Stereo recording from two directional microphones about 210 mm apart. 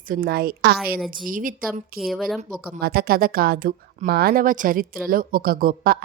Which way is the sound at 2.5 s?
40° right (ahead or behind).